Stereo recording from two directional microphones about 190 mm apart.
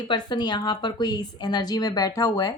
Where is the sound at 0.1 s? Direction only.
20° left (ahead or behind).